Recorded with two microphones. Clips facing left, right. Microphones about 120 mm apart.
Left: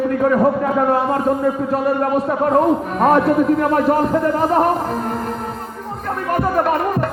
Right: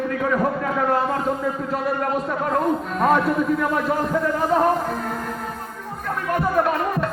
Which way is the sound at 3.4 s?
65° left (ahead or behind).